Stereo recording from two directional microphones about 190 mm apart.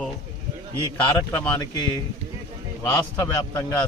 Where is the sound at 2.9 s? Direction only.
15° left (ahead or behind).